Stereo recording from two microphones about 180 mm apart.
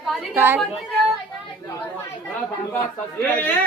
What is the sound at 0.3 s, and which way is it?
Speech, 10° right (ahead or behind).